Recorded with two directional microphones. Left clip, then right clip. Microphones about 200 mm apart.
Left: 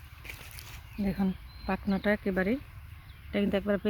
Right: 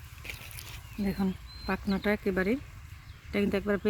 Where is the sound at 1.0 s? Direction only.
40° left (ahead or behind).